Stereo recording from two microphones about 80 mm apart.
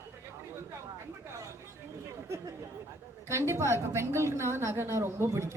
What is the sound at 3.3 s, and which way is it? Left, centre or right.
A woman's voice, right.